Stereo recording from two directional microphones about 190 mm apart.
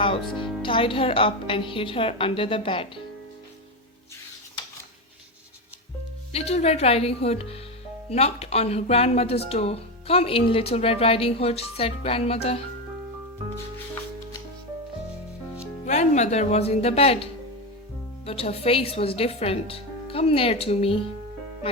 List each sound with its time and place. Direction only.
0.6 s a woman's voice: 25° left (ahead or behind)
6.3 s speech: 35° left (ahead or behind)
15.9 s speech: 35° left (ahead or behind)
18.3 s speech: 30° left (ahead or behind)